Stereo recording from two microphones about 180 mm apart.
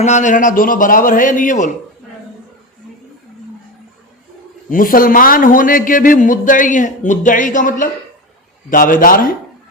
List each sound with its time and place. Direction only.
0.0 s a man's voice: 40° left (ahead or behind)
4.7 s a man's voice: 50° left (ahead or behind)